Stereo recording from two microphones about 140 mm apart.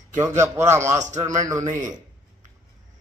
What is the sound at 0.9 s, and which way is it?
Speech, 55° right (ahead or behind).